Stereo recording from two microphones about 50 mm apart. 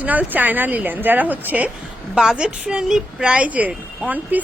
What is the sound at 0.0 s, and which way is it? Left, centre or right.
A woman's voice, right.